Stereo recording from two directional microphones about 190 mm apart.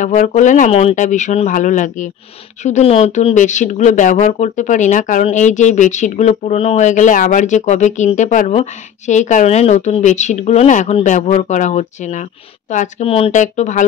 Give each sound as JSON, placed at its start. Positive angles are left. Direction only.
{"t": 0.0, "sound": "speech", "side_deg": 40}